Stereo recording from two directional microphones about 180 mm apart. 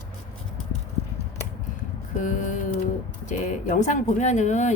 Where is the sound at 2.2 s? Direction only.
45° left (ahead or behind).